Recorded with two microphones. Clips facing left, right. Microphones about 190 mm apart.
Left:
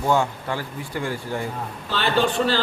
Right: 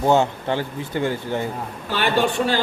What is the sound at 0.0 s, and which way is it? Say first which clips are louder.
A man's voice: right 4 dB; 25° right (ahead or behind).